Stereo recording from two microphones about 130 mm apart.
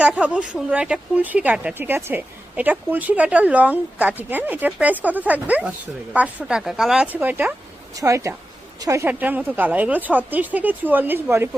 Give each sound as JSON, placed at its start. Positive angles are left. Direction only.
{"t": 0.0, "sound": "speech", "side_deg": -10}